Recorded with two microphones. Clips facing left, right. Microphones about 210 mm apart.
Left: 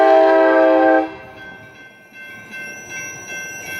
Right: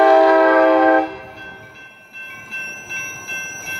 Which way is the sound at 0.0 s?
20° left (ahead or behind).